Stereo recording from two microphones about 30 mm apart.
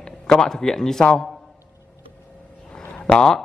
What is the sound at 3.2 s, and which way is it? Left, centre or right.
Speech, centre.